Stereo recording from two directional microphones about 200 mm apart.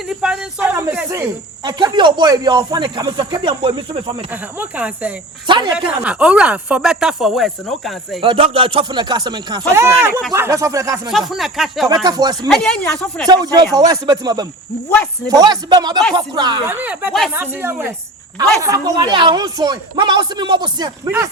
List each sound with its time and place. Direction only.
0.1 s speech: 5° right (ahead or behind)
1.6 s speech: 20° right (ahead or behind)
4.3 s speech: 10° right (ahead or behind)
5.5 s speech: 25° right (ahead or behind)
5.7 s speech: 5° right (ahead or behind)
8.2 s speech: 25° right (ahead or behind)
11.1 s speech: centre (ahead or behind)
12.0 s speech: 20° right (ahead or behind)
12.5 s speech: 5° left (ahead or behind)
13.2 s speech: 20° right (ahead or behind)
16.7 s speech: 10° right (ahead or behind)